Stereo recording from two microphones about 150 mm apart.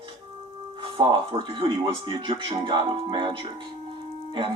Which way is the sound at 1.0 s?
30° right (ahead or behind).